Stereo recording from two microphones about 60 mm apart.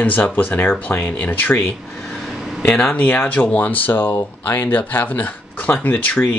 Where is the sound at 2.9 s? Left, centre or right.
Left.